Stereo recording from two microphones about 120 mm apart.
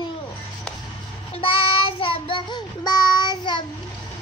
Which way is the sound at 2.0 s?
45° left (ahead or behind).